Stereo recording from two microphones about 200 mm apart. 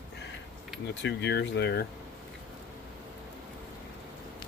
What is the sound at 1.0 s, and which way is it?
Speech, 60° left (ahead or behind).